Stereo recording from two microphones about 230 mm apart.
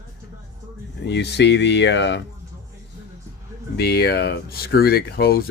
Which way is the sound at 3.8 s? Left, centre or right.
Left.